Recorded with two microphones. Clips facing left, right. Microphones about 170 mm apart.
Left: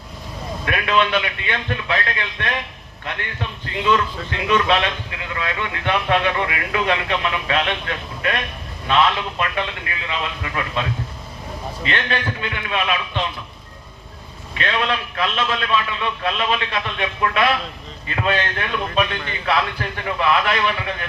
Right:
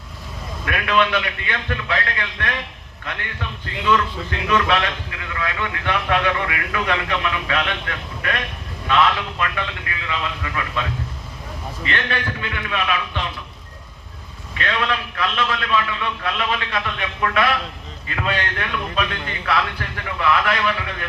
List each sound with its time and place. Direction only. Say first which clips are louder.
0.6 s a man's voice: even; 25° left (ahead or behind)
3.8 s a man's voice: even; 25° left (ahead or behind)
12.4 s a man's voice: left 1 dB; 25° left (ahead or behind)
14.6 s a man's voice: left 1 dB; 25° left (ahead or behind)